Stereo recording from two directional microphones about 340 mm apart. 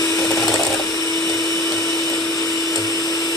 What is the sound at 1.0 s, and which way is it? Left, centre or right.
Dental drill, centre.